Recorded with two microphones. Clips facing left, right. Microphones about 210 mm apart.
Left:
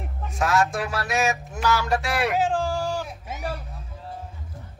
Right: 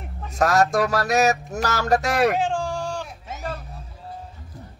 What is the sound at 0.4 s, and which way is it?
Music, 40° right (ahead or behind).